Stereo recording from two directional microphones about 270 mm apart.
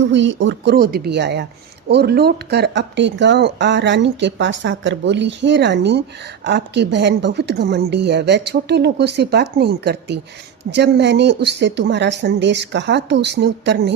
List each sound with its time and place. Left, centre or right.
0.0 s speech: right